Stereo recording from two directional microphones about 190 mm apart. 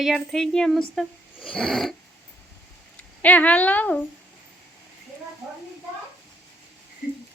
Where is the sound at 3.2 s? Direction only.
10° left (ahead or behind).